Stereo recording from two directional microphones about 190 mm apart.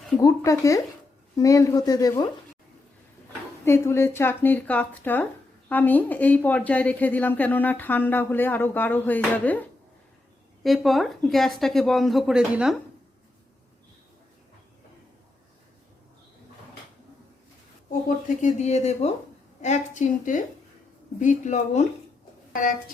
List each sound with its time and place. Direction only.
0.2 s speech: 15° left (ahead or behind)
3.6 s speech: 15° left (ahead or behind); by 12.7 s 5° right (ahead or behind)
18.4 s a woman's voice: 35° left (ahead or behind)